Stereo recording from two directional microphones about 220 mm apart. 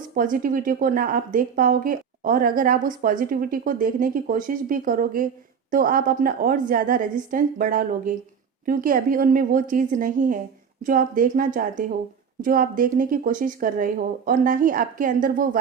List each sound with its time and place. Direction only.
0.2 s speech: 40° right (ahead or behind)